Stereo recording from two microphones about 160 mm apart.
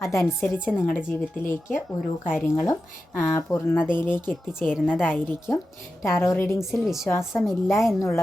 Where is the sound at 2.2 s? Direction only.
5° right (ahead or behind).